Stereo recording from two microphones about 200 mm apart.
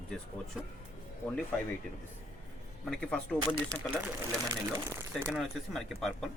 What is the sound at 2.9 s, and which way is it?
Speech, 5° left (ahead or behind).